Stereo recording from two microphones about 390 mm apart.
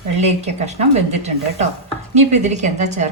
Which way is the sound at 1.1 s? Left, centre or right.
Centre.